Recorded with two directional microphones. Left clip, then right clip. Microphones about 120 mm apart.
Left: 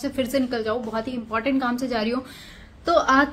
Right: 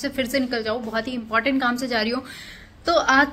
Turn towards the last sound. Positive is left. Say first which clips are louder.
# right 1 dB
turn(degrees=25)  # may be behind; listen again after turning